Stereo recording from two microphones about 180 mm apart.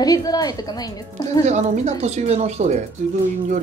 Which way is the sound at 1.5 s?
40° right (ahead or behind).